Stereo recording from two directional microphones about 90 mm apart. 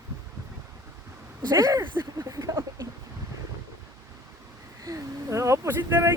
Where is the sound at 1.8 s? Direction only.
65° right (ahead or behind).